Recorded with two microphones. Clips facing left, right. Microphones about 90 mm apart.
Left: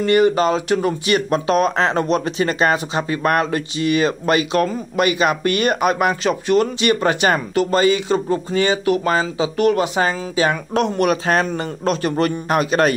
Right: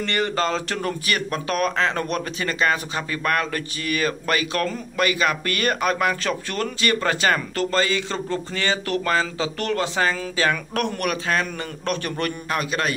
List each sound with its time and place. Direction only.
0.0 s speech: 15° left (ahead or behind)
1.0 s speech: 30° left (ahead or behind)